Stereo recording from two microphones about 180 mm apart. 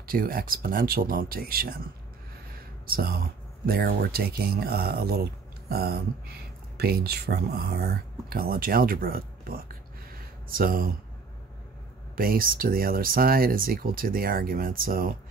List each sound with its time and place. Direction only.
0.0 s speech: 55° right (ahead or behind)
2.9 s speech: 55° right (ahead or behind)
10.1 s a sound: 55° right (ahead or behind)
12.2 s speech: 55° right (ahead or behind)